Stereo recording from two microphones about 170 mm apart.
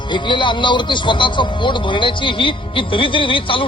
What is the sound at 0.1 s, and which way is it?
A man's voice, 25° left (ahead or behind).